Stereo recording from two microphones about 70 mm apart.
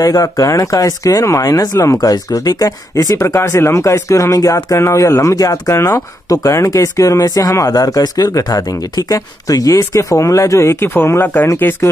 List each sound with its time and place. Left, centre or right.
0.0 s speech: left